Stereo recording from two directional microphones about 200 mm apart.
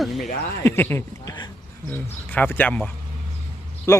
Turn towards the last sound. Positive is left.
turn(degrees=15)  # may be behind; listen again after turning